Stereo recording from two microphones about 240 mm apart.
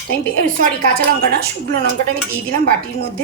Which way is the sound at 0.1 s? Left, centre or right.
Right.